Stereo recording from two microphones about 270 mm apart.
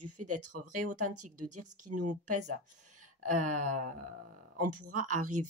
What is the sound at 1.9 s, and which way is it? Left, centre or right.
Speech, right.